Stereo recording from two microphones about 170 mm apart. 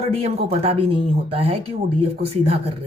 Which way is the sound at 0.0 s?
35° right (ahead or behind).